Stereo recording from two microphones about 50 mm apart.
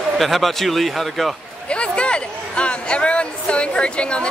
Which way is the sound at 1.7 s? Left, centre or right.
Left.